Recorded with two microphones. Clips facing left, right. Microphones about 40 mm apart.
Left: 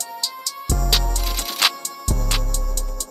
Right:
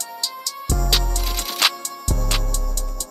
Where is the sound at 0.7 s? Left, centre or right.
Centre.